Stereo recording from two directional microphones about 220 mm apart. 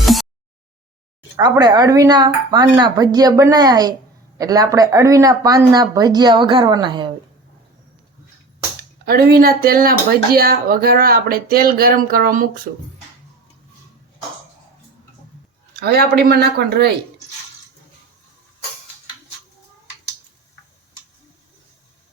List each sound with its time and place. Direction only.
0.0 s a sound: centre (ahead or behind)
1.4 s speech: 20° right (ahead or behind)
9.0 s speech: 45° right (ahead or behind)
15.7 s speech: 45° right (ahead or behind)